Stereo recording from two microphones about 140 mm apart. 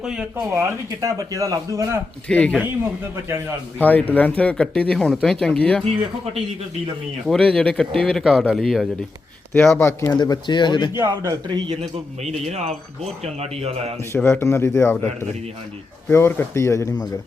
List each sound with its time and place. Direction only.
0.0 s speech: 5° right (ahead or behind)
1.0 s a man's voice: 25° right (ahead or behind)
2.2 s a man's voice: 10° left (ahead or behind)
2.6 s a man's voice: 20° right (ahead or behind)
3.8 s a man's voice: 10° left (ahead or behind)
7.3 s speech: 5° left (ahead or behind)
9.7 s speech: 20° left (ahead or behind)
10.2 s speech: 30° left (ahead or behind)
10.9 s a man's voice: 20° right (ahead or behind)
11.4 s speech: 35° right (ahead or behind)
12.2 s speech: 50° right (ahead or behind)
14.1 s a man's voice: 20° left (ahead or behind)